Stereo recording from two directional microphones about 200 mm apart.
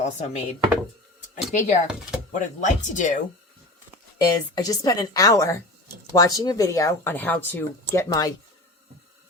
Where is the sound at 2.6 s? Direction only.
35° left (ahead or behind).